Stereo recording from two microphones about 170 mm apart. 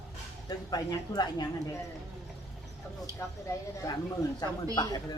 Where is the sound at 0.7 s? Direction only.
25° left (ahead or behind).